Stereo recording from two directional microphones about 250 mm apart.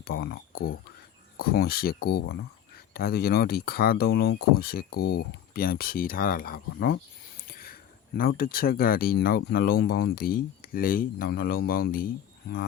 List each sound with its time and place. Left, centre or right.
0.0 s speech: left
7.4 s a sound: left
8.2 s speech: left